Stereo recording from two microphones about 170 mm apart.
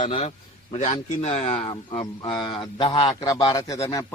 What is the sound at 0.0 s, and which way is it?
A man's voice, 35° left (ahead or behind).